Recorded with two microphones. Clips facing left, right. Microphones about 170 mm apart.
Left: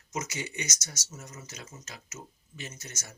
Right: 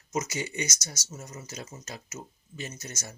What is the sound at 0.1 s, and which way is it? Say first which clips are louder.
Speech: right 4 dB; 35° right (ahead or behind).